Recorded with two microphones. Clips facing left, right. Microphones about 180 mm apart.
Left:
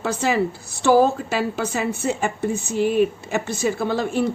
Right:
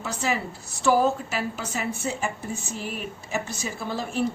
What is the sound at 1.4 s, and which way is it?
Speech, 80° left.